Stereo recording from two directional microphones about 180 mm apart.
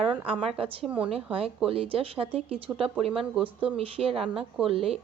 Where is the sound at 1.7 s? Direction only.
30° right (ahead or behind).